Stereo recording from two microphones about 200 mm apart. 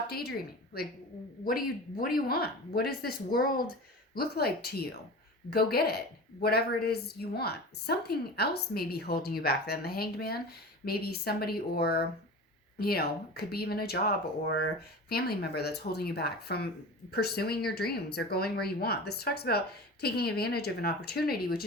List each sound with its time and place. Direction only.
0.1 s speech: 50° left (ahead or behind)